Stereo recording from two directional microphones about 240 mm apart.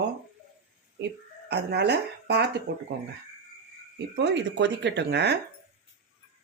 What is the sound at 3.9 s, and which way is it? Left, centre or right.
Speech, right.